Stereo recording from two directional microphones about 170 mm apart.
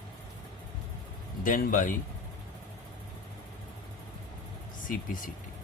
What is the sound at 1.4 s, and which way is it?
Speech, 55° left (ahead or behind).